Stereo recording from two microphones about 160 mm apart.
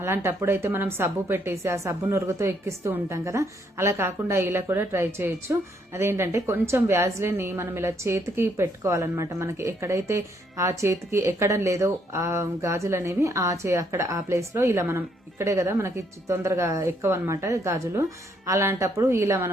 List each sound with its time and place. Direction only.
0.0 s a woman's voice: 15° right (ahead or behind)